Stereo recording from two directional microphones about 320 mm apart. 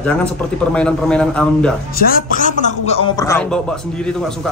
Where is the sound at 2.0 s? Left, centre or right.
Left; by 3.6 s centre.